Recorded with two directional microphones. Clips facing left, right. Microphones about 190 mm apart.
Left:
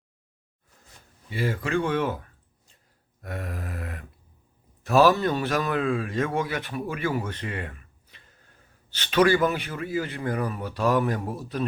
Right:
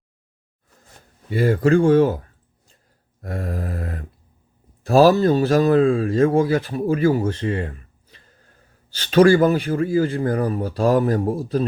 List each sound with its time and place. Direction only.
1.3 s a man's voice: 45° right (ahead or behind)
3.2 s a sound: 35° right (ahead or behind)
4.9 s a man's voice: 35° right (ahead or behind)